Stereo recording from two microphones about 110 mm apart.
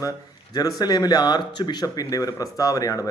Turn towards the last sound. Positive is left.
turn(degrees=35)  # may be behind; listen again after turning